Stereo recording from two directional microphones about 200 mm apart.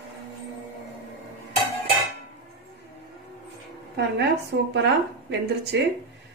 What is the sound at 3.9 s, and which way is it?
A woman's voice, 60° right (ahead or behind).